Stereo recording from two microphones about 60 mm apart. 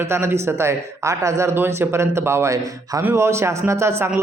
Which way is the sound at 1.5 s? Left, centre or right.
Right.